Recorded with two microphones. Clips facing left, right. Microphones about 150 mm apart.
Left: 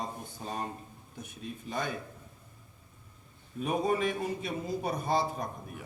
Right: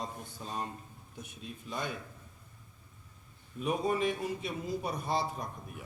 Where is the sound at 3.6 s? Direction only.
50° left (ahead or behind).